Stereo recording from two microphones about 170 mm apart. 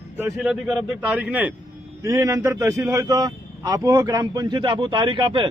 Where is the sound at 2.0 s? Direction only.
20° right (ahead or behind).